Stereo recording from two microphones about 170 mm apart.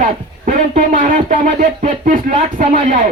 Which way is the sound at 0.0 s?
50° right (ahead or behind).